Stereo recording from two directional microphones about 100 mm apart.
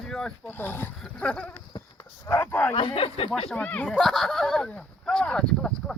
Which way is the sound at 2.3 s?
25° left (ahead or behind).